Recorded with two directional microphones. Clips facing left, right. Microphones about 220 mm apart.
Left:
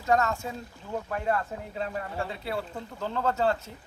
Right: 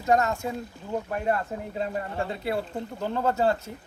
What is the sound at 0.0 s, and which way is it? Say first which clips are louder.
Speech: right 2 dB; 20° right (ahead or behind).